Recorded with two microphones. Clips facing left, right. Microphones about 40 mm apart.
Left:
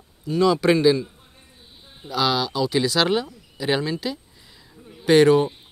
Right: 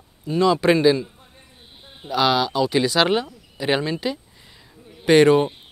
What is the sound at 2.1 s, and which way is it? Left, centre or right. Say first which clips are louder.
Speech: right 3 dB; centre.